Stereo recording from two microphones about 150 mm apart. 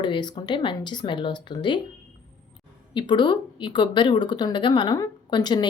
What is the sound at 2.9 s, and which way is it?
Speech, 30° left (ahead or behind).